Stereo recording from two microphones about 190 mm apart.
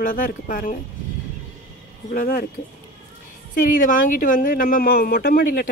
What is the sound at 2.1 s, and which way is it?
Speech, 50° left (ahead or behind).